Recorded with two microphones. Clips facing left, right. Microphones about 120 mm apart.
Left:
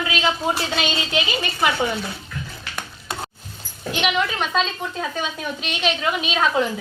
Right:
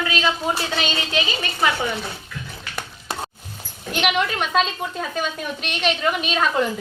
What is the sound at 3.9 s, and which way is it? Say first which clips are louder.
A woman's voice: right 1 dB; 5° right (ahead or behind).